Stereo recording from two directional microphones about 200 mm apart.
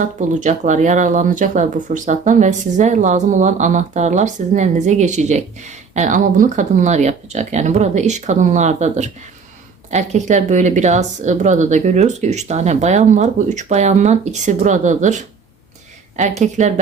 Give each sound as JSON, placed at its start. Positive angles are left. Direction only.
{"t": 0.2, "sound": "speech", "side_deg": -40}
{"t": 16.4, "sound": "speech", "side_deg": -35}